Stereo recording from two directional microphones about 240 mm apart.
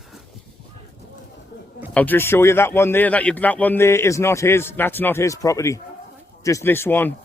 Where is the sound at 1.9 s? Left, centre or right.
Centre.